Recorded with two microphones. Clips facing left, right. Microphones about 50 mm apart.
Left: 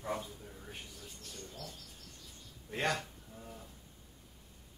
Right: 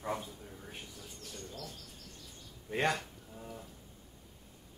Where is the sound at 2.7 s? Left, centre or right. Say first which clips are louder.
Right 2 dB; centre.